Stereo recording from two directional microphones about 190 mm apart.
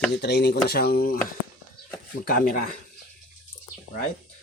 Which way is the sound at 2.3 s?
50° left (ahead or behind).